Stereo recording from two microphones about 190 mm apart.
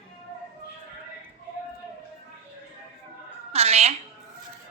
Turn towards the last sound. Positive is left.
turn(degrees=-35)  # may be behind; listen again after turning